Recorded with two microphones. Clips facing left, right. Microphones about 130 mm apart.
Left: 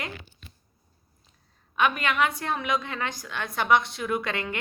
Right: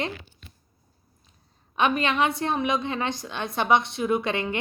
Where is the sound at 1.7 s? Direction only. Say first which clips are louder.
Right 2 dB; 25° right (ahead or behind).